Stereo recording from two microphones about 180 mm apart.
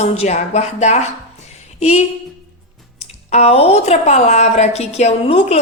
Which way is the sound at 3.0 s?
35° left (ahead or behind).